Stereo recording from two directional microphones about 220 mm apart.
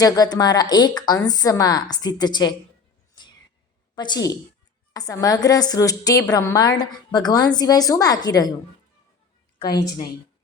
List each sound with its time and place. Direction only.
0.0 s a woman's voice: 15° left (ahead or behind)
3.9 s a woman's voice: 20° left (ahead or behind)
9.6 s a woman's voice: 15° left (ahead or behind)